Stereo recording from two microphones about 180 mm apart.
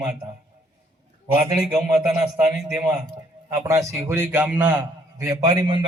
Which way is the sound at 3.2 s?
20° right (ahead or behind).